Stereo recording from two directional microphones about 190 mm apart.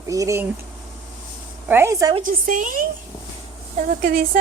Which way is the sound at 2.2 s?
45° right (ahead or behind).